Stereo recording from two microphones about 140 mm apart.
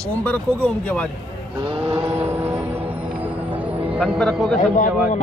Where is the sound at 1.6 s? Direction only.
40° right (ahead or behind).